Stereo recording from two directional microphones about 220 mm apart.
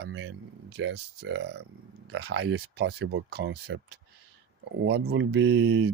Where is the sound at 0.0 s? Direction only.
55° right (ahead or behind).